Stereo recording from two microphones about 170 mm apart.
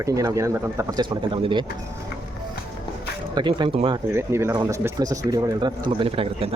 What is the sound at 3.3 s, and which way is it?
Speech, 25° right (ahead or behind).